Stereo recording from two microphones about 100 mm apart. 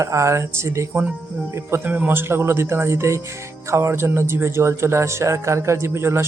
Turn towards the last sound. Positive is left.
turn(degrees=-25)  # may be behind; listen again after turning